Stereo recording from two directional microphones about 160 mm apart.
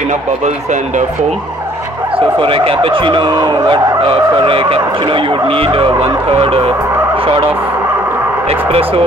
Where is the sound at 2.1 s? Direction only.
35° right (ahead or behind).